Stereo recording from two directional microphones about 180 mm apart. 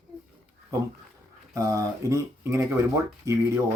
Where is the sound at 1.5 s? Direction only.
20° right (ahead or behind).